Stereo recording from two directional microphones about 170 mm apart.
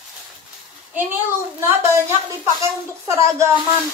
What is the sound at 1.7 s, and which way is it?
Speech, 15° right (ahead or behind).